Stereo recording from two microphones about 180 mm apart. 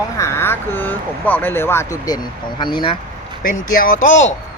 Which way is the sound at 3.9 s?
90° left.